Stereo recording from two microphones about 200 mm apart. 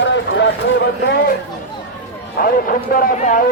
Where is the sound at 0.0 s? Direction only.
65° left (ahead or behind).